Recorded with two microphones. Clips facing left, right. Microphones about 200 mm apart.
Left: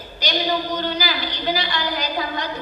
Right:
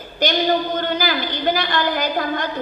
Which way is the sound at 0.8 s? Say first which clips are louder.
Right 3 dB; 50° right (ahead or behind).